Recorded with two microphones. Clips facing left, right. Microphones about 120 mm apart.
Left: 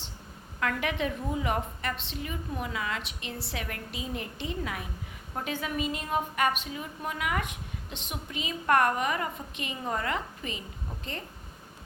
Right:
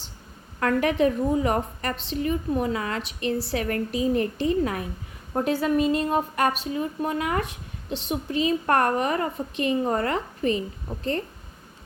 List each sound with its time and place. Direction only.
0.6 s a woman's voice: 40° right (ahead or behind)